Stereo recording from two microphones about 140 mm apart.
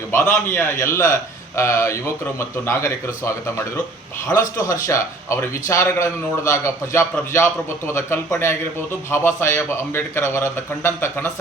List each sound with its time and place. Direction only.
0.1 s a man's voice: 15° left (ahead or behind)